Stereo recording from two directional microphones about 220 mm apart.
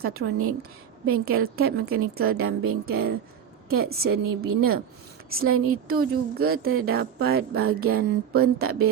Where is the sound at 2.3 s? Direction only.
75° right (ahead or behind).